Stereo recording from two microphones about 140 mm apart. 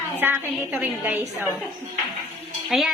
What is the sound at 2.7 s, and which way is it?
Speech, centre (ahead or behind).